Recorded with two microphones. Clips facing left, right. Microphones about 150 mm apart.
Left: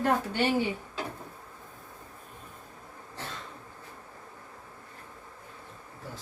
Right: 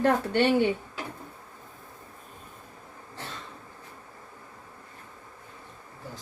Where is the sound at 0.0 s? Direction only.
65° right (ahead or behind).